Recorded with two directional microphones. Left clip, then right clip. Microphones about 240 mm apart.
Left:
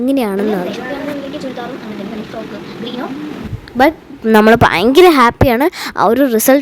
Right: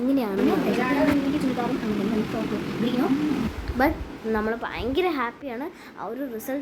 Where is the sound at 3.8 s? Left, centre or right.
Left.